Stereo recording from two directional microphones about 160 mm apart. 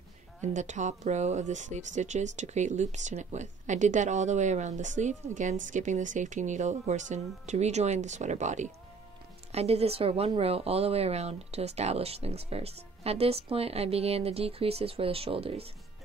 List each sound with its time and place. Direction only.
0.4 s speech: 50° right (ahead or behind)